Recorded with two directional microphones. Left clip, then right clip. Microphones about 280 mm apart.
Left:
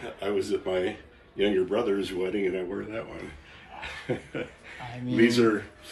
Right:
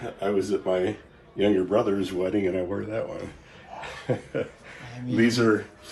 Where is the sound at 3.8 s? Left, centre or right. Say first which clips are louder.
Right 3 dB; right.